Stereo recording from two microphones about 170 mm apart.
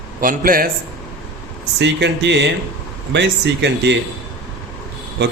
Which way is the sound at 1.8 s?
90° right.